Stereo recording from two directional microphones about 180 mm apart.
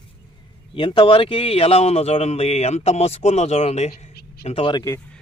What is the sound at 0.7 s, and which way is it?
Speech, 30° left (ahead or behind).